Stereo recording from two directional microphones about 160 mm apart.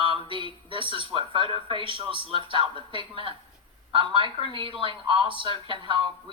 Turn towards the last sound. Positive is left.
turn(degrees=-30)  # may be behind; listen again after turning